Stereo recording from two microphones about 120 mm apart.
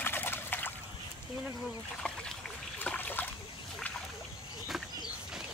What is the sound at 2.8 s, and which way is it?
Boat, 15° left (ahead or behind).